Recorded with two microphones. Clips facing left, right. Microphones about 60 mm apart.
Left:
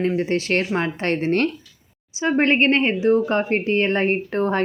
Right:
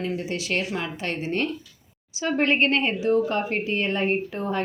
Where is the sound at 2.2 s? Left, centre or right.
Left.